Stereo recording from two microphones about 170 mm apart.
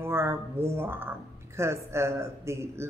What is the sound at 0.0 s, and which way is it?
A woman's voice, 15° right (ahead or behind).